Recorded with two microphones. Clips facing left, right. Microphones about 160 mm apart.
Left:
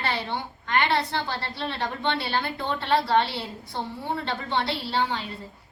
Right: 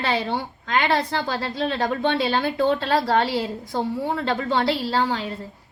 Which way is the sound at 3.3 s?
90° right.